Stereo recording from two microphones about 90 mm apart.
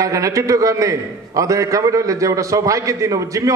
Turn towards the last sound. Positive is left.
turn(degrees=-35)  # may be behind; listen again after turning